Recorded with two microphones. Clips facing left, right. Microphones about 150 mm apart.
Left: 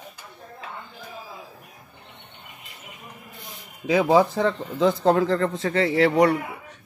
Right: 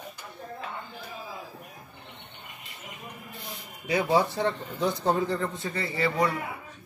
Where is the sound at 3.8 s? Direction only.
90° left.